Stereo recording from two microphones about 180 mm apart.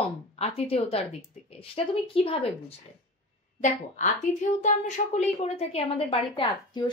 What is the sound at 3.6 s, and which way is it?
Speech, 45° left (ahead or behind).